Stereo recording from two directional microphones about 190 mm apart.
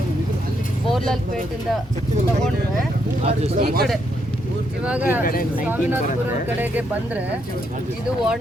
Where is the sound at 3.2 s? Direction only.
35° right (ahead or behind).